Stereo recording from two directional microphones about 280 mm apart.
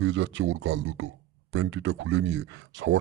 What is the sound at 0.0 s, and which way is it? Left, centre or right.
Speech, right.